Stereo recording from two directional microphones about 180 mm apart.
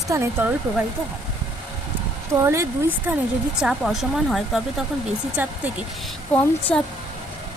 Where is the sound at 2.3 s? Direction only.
15° right (ahead or behind).